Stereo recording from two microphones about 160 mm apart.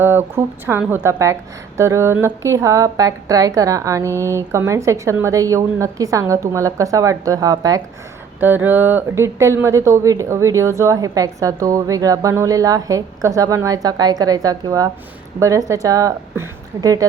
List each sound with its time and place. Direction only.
0.0 s a woman's voice: 15° right (ahead or behind)
8.4 s a woman's voice: 10° right (ahead or behind)